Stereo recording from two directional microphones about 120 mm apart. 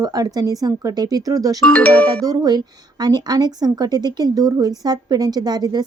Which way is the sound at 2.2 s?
35° right (ahead or behind).